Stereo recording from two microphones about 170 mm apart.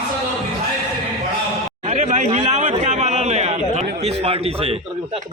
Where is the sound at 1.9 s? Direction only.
45° right (ahead or behind).